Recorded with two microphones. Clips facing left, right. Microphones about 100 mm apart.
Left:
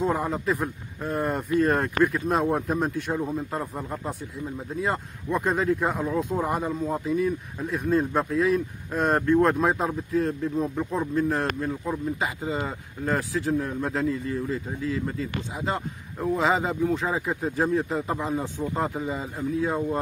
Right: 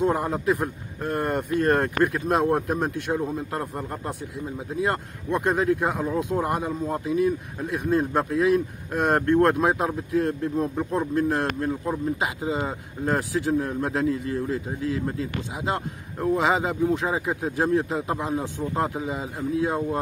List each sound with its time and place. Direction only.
0.0 s speech: 5° right (ahead or behind)
13.5 s speech: 5° right (ahead or behind)
15.6 s speech: 5° right (ahead or behind)